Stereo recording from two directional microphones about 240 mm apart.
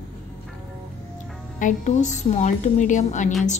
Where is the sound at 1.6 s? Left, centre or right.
Left.